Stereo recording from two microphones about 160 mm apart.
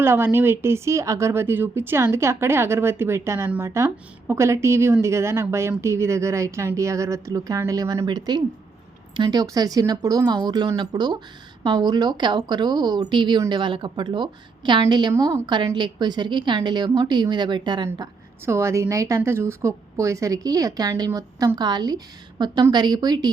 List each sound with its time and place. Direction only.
0.0 s a woman's voice: 15° right (ahead or behind)